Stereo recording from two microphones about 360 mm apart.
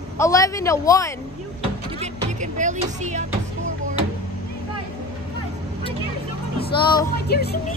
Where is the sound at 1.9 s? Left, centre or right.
Centre.